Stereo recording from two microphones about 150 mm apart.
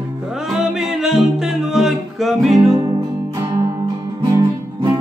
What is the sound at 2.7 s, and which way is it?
Music, 25° right (ahead or behind).